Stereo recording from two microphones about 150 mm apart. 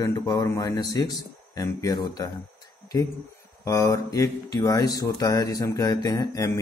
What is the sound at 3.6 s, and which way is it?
Speech, 20° left (ahead or behind).